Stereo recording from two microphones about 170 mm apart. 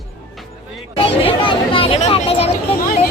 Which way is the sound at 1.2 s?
30° left (ahead or behind).